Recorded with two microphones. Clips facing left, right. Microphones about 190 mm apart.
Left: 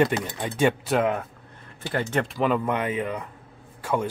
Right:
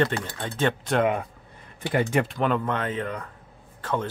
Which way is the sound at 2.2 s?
5° left (ahead or behind).